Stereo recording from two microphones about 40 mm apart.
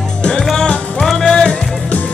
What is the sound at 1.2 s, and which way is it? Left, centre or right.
Music, centre.